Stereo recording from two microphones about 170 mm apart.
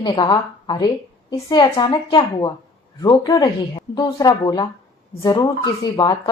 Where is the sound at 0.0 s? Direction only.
25° left (ahead or behind).